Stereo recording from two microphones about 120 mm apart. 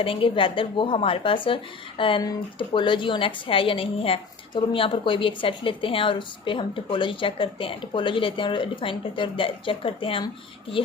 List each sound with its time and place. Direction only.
0.0 s a woman's voice: 50° left (ahead or behind)